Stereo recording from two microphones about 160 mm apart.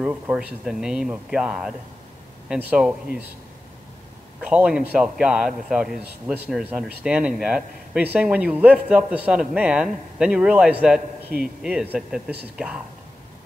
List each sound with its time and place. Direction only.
0.0 s speech: 10° right (ahead or behind)
4.4 s a man's voice: 10° right (ahead or behind)
11.2 s speech: 70° right (ahead or behind)
11.6 s speech: 5° right (ahead or behind)